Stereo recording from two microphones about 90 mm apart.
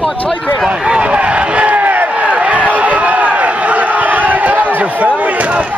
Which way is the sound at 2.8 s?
15° right (ahead or behind).